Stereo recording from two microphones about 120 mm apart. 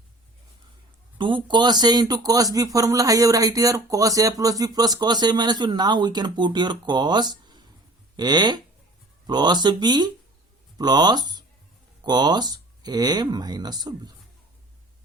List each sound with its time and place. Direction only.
1.2 s speech: 40° right (ahead or behind)